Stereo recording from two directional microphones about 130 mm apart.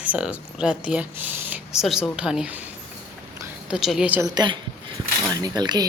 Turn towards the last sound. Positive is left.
turn(degrees=-35)  # may be behind; listen again after turning